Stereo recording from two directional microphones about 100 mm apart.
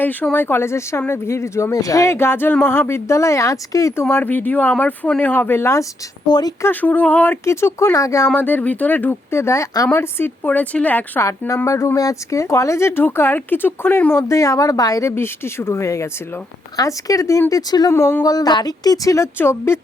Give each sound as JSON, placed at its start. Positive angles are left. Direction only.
{"t": 0.0, "sound": "speech", "side_deg": 15}
{"t": 4.1, "sound": "speech", "side_deg": 20}
{"t": 6.2, "sound": "speech", "side_deg": 45}
{"t": 6.6, "sound": "speech", "side_deg": 20}
{"t": 7.4, "sound": "speech", "side_deg": 30}
{"t": 8.4, "sound": "speech", "side_deg": 15}
{"t": 11.3, "sound": "speech", "side_deg": 30}
{"t": 14.2, "sound": "speech", "side_deg": 30}
{"t": 15.1, "sound": "speech", "side_deg": 25}
{"t": 17.9, "sound": "speech", "side_deg": 25}
{"t": 18.2, "sound": "speech", "side_deg": 40}